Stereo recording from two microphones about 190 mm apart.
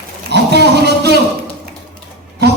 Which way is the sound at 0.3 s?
60° right (ahead or behind).